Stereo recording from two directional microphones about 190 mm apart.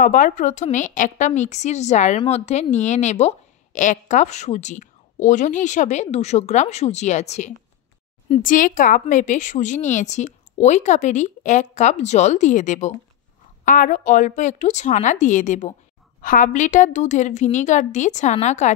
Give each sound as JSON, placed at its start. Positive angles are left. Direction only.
{"t": 0.0, "sound": "a woman's voice", "side_deg": 45}